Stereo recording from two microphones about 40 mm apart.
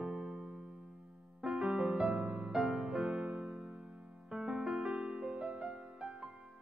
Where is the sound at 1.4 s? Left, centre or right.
Centre.